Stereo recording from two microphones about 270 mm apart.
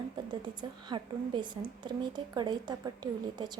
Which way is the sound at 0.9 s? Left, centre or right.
Centre.